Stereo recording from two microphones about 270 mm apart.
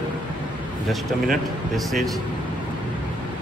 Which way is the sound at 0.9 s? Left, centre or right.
Centre.